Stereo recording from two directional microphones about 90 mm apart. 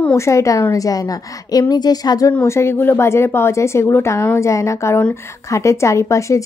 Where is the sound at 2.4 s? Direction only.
30° left (ahead or behind).